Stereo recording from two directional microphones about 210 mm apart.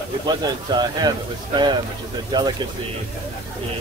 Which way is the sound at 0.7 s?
20° right (ahead or behind).